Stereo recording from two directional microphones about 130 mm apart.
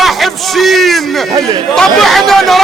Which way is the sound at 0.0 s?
Centre (ahead or behind).